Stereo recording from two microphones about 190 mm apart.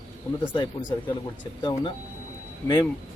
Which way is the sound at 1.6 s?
25° left (ahead or behind).